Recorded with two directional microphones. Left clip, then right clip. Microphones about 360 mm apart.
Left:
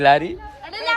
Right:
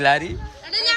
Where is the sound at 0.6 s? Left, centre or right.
Centre.